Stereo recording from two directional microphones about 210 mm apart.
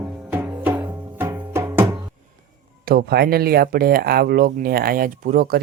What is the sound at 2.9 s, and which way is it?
Speech, 45° right (ahead or behind).